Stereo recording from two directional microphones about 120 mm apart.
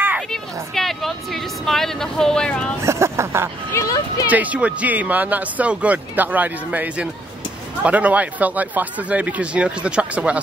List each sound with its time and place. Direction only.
0.3 s speech: centre (ahead or behind)
2.8 s speech: 25° right (ahead or behind)
3.7 s speech: 30° left (ahead or behind)
4.3 s speech: 10° right (ahead or behind)